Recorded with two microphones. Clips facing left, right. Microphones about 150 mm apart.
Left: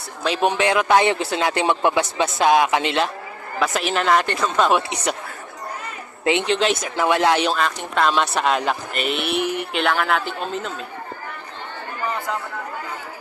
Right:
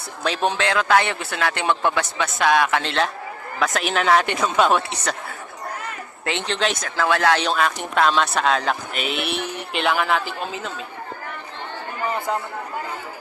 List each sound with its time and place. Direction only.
0.4 s a man's voice: 15° left (ahead or behind)
2.8 s a man's voice: 5° left (ahead or behind)
4.7 s speech: 10° left (ahead or behind)
6.2 s speech: 15° left (ahead or behind)
6.5 s a man's voice: 5° left (ahead or behind)
6.9 s speech: 15° left (ahead or behind)
7.4 s a man's voice: centre (ahead or behind)